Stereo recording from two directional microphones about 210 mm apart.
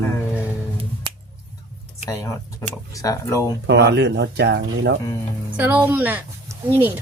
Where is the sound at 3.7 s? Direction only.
55° right (ahead or behind).